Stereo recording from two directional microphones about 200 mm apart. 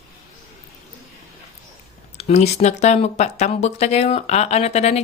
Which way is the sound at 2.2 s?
35° left (ahead or behind).